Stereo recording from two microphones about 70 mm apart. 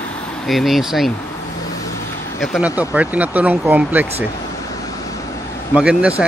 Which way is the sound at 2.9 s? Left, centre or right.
Right.